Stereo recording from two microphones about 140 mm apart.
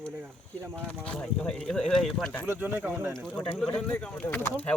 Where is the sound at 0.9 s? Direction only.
10° left (ahead or behind).